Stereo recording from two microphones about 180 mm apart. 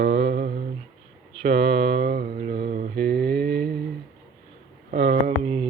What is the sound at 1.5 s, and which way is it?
Mantra, 65° right (ahead or behind).